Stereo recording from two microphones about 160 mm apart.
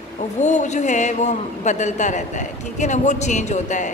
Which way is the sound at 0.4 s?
50° left (ahead or behind).